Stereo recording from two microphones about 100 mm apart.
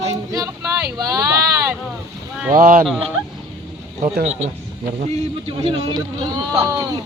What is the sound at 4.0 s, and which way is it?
A man's voice, 90° right.